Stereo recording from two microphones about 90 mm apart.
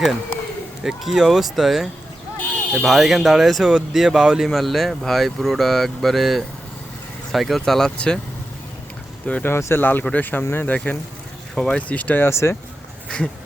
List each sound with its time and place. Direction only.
0.9 s speech: 5° right (ahead or behind)
9.2 s speech: 15° left (ahead or behind)
9.5 s speech: 30° left (ahead or behind); by 11.8 s 5° left (ahead or behind)
11.8 s speech: 15° left (ahead or behind)
13.1 s a sound: 10° left (ahead or behind)